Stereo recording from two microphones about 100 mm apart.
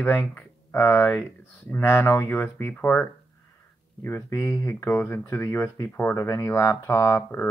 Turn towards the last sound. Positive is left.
turn(degrees=25)  # may be behind; listen again after turning